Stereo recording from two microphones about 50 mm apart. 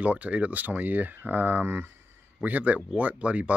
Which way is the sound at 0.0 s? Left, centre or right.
Right.